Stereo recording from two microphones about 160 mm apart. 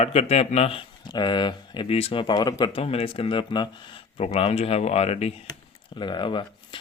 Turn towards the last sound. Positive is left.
turn(degrees=30)  # may be behind; listen again after turning